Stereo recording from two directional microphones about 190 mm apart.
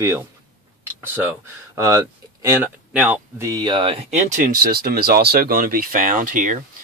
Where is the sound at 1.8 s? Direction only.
15° right (ahead or behind).